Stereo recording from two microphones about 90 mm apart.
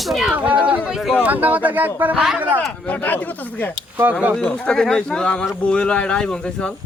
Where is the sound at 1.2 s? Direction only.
20° right (ahead or behind).